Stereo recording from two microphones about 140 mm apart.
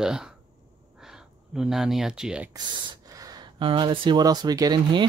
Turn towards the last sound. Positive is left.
turn(degrees=-30)  # may be behind; listen again after turning